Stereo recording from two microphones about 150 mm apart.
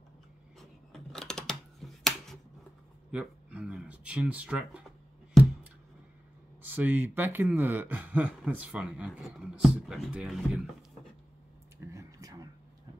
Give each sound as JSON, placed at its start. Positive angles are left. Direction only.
{"t": 0.6, "sound": "scissors", "side_deg": 5}
{"t": 3.1, "sound": "speech", "side_deg": -5}
{"t": 6.6, "sound": "speech", "side_deg": -10}
{"t": 11.8, "sound": "a sound", "side_deg": -20}